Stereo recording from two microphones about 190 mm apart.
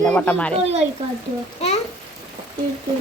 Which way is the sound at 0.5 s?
35° right (ahead or behind).